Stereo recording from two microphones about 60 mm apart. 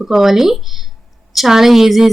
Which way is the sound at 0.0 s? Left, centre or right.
Centre.